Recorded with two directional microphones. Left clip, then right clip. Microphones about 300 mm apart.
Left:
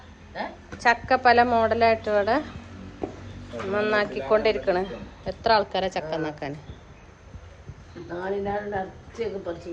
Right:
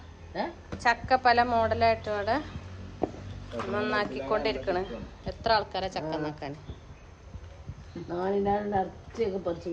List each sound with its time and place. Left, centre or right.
0.8 s a woman's voice: centre
3.7 s a woman's voice: centre
8.1 s a woman's voice: right